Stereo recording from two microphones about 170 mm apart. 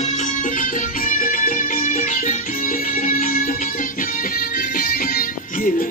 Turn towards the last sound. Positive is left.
turn(degrees=60)  # may be behind; listen again after turning